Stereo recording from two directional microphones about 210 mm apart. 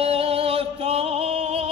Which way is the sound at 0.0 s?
30° right (ahead or behind).